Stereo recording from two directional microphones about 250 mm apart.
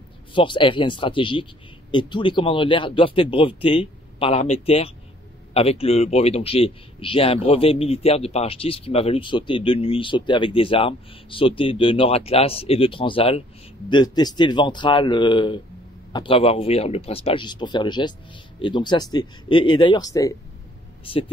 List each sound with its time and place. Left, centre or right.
0.3 s a man's voice: centre